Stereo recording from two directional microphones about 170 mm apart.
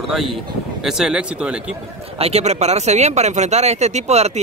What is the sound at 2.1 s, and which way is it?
Speech, 35° right (ahead or behind).